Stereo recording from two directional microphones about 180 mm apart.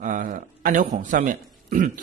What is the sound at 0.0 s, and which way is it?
Speech, 45° right (ahead or behind).